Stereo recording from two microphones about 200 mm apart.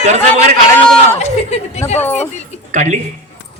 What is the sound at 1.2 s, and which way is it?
Speech, 35° left (ahead or behind).